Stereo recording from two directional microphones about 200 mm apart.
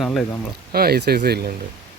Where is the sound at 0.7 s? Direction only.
50° right (ahead or behind).